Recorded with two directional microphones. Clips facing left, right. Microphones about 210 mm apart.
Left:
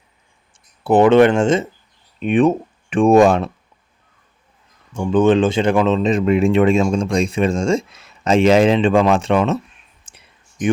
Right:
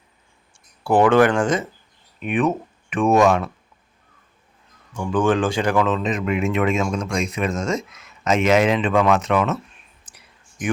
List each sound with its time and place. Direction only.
0.9 s speech: 20° left (ahead or behind)
4.9 s speech: 20° left (ahead or behind)
10.1 s a sound: 25° left (ahead or behind)